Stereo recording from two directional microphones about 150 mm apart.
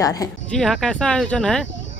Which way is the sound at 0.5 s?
5° left (ahead or behind).